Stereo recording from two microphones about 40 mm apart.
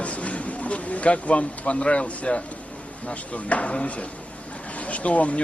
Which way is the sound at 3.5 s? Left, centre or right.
Left.